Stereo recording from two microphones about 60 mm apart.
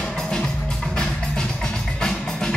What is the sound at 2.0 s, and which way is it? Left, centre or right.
Music, centre.